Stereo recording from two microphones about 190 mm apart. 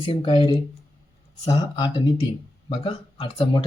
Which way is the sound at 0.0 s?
30° left (ahead or behind).